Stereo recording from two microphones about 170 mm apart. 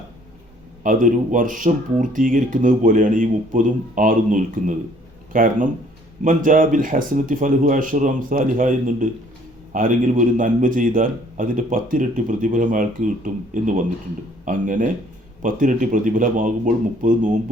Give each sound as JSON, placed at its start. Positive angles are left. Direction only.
{"t": 0.8, "sound": "a man's voice", "side_deg": -50}